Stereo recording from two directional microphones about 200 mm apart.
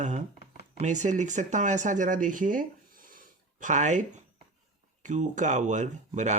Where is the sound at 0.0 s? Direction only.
35° right (ahead or behind).